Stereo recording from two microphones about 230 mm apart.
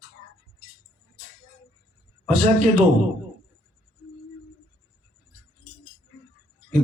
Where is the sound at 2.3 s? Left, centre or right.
Right.